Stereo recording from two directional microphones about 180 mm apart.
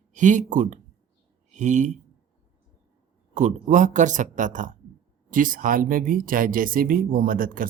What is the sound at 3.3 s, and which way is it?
Speech, 40° right (ahead or behind).